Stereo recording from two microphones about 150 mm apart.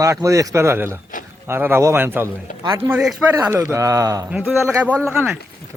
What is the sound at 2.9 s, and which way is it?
Speech, 5° right (ahead or behind).